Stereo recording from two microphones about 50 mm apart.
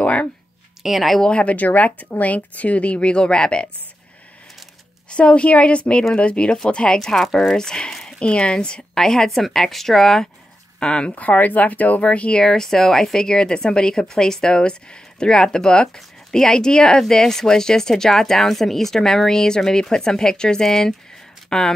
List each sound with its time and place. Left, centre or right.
0.0 s a sound: left
0.8 s speech: centre
1.3 s speech: left
5.1 s speech: left
8.2 s speech: left
10.8 s speech: centre